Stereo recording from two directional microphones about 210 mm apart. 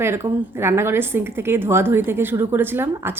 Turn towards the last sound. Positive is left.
turn(degrees=-10)  # may be behind; listen again after turning